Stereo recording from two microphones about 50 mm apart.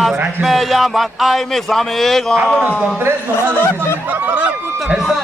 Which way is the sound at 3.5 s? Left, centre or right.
Left.